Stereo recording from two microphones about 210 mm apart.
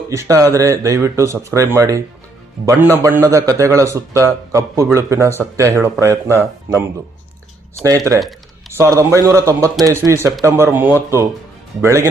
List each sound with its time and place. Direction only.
0.1 s a man's voice: 15° right (ahead or behind)
7.9 s a man's voice: 15° right (ahead or behind)